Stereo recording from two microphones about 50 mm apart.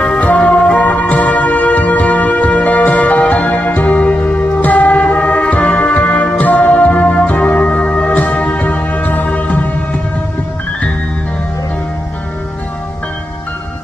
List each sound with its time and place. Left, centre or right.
0.4 s music: left